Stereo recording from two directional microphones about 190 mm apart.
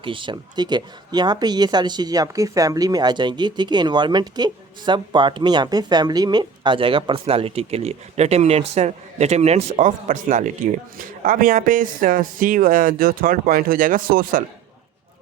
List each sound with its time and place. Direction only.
0.0 s speech: 25° right (ahead or behind); by 14.4 s 50° right (ahead or behind)